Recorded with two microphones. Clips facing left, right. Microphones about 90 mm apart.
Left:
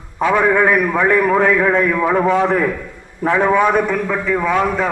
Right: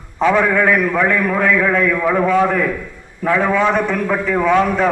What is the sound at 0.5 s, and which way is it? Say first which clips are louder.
A man's voice: even; 20° left (ahead or behind).